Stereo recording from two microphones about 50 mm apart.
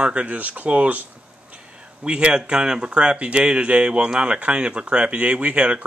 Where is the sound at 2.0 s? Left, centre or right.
Centre.